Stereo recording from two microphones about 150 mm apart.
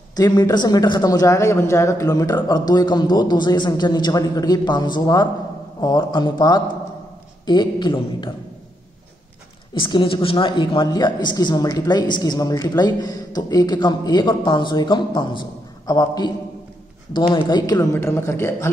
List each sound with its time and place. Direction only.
0.1 s speech: 25° left (ahead or behind)
9.8 s speech: 35° left (ahead or behind)
17.9 s a man's voice: 15° left (ahead or behind)